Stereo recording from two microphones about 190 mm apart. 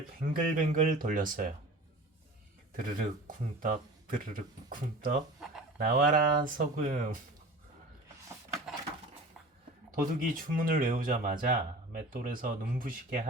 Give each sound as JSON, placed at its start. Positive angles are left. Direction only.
{"t": 0.2, "sound": "speech", "side_deg": -45}
{"t": 2.7, "sound": "speech", "side_deg": -45}
{"t": 9.9, "sound": "speech", "side_deg": -45}